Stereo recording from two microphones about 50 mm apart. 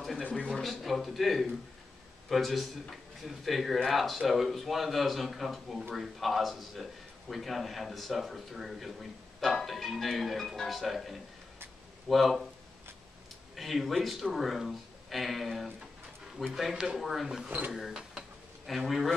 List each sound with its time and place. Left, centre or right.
0.5 s a man's voice: centre
13.6 s a man's voice: centre
17.5 s speech: right
17.7 s a man's voice: centre